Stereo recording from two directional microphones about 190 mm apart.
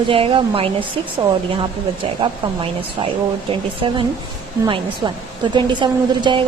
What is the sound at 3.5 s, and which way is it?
A woman's voice, 25° right (ahead or behind).